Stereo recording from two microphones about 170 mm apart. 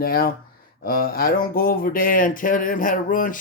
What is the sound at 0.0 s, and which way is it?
Speech, 60° left (ahead or behind).